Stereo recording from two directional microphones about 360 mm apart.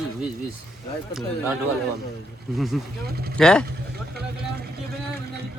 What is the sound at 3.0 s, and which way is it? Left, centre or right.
Speech, right.